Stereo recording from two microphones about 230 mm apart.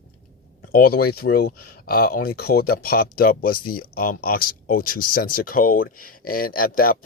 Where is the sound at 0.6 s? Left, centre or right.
Left.